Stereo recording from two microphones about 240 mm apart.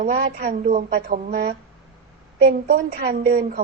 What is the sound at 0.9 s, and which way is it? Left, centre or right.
A woman's voice, right.